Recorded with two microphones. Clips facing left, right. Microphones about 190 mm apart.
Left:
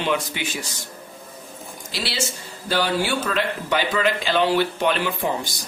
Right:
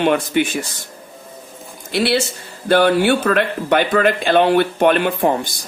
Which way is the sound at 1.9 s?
60° right (ahead or behind).